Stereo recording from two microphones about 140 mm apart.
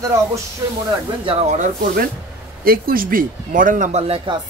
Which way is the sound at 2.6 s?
90° right.